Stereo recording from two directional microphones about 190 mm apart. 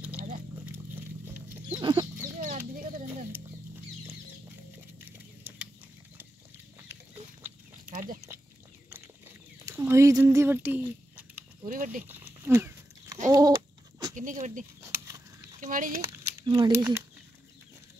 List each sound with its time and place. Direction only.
0.7 s pig: 10° right (ahead or behind)
1.8 s chicken: 20° right (ahead or behind)
2.4 s chicken: 45° right (ahead or behind)
5.0 s patter: 10° right (ahead or behind)
7.8 s a sound: 45° right (ahead or behind)
9.7 s a sound: 15° right (ahead or behind)
11.6 s speech: 45° right (ahead or behind)
12.1 s dog: 10° right (ahead or behind)
13.3 s chicken: 20° right (ahead or behind)
14.1 s a sound: 40° right (ahead or behind)
14.8 s a sound: 15° right (ahead or behind)
15.6 s speech: 45° right (ahead or behind)
16.3 s speech: 15° right (ahead or behind)